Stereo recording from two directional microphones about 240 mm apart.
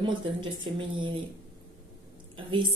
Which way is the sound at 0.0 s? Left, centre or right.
Centre.